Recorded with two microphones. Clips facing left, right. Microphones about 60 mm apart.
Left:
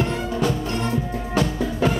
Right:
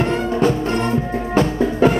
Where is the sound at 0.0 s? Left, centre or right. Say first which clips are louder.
Right 6 dB; right.